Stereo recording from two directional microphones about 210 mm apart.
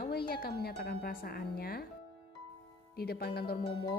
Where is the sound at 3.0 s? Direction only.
50° left (ahead or behind).